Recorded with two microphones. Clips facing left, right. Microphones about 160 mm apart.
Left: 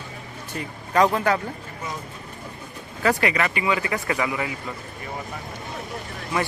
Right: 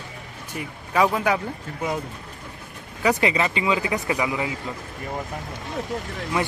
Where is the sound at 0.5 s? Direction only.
5° right (ahead or behind).